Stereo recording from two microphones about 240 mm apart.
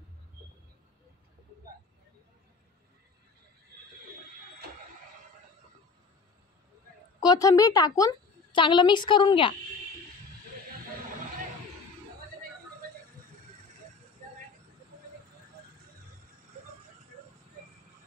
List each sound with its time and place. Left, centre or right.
7.2 s a woman's voice: centre